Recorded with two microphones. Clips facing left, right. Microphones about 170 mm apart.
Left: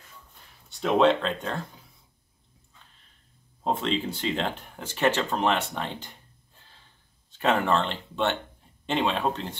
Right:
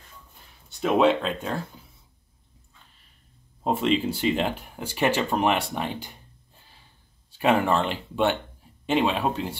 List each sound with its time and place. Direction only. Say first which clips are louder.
0.7 s speech: right 1 dB; 5° right (ahead or behind)
3.6 s speech: right 4 dB; 10° right (ahead or behind)
6.7 s a sound: right 2 dB; 10° right (ahead or behind)
8.8 s speech: right 3 dB; 5° right (ahead or behind)